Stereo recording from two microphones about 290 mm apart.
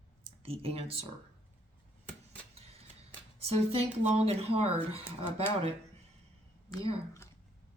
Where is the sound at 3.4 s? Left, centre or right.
Right.